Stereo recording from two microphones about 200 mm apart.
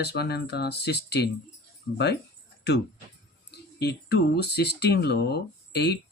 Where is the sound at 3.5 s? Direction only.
55° left (ahead or behind).